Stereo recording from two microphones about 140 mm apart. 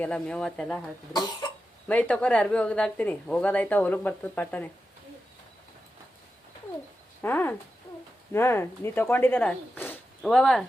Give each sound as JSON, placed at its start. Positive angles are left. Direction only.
{"t": 0.0, "sound": "speech", "side_deg": 5}
{"t": 1.9, "sound": "speech", "side_deg": 10}
{"t": 7.2, "sound": "speech", "side_deg": 15}